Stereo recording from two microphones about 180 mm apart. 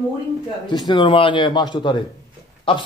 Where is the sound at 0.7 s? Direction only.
25° left (ahead or behind).